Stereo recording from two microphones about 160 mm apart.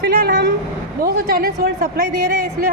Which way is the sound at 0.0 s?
90° right.